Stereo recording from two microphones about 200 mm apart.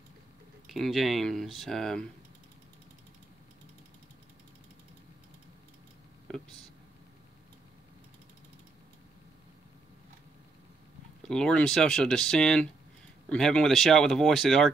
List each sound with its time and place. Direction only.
0.7 s speech: centre (ahead or behind)
11.2 s speech: 5° left (ahead or behind)